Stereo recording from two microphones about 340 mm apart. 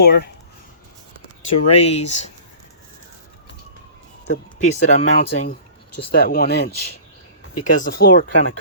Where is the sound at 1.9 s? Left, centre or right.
Centre.